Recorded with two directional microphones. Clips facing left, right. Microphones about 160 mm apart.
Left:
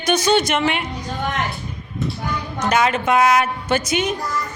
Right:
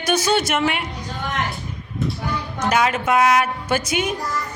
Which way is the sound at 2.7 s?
5° right (ahead or behind).